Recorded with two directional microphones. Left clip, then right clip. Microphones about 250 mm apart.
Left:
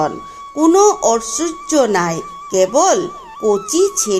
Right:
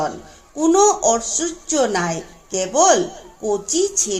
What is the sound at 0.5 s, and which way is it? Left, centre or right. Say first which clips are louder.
Speech: left 4 dB; left.